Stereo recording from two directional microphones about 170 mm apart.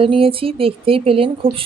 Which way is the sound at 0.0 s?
35° right (ahead or behind).